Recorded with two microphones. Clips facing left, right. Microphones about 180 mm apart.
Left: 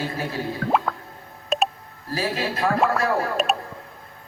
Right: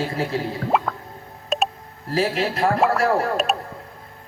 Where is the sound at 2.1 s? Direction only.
30° right (ahead or behind).